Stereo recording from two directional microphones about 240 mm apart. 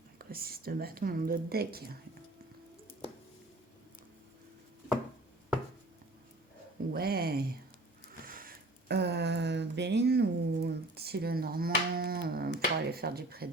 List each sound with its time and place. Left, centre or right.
0.2 s a woman's voice: right
6.9 s a woman's voice: right
8.2 s a sound: right